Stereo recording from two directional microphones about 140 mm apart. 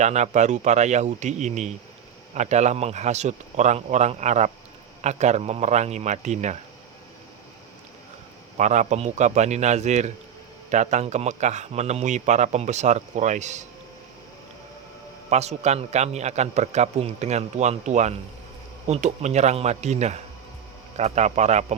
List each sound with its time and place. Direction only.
0.0 s a man's voice: 55° right (ahead or behind)
8.5 s a man's voice: 55° right (ahead or behind)
15.3 s a man's voice: 50° right (ahead or behind)